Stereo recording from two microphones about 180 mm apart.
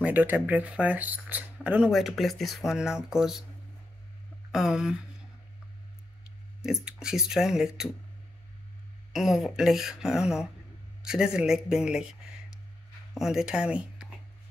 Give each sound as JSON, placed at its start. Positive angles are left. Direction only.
{"t": 0.0, "sound": "speech", "side_deg": -10}
{"t": 4.5, "sound": "speech", "side_deg": -5}
{"t": 6.6, "sound": "speech", "side_deg": -5}
{"t": 9.1, "sound": "speech", "side_deg": 0}